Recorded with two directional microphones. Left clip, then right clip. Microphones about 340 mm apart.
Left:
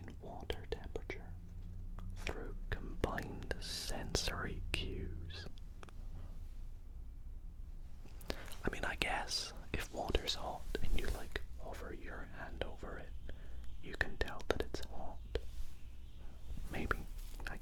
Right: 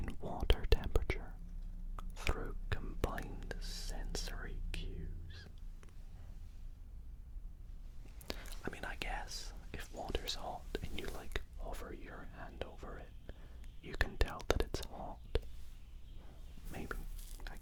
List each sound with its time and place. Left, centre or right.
0.0 s whispering: right; by 5.5 s centre
8.3 s whispering: centre
16.7 s whispering: centre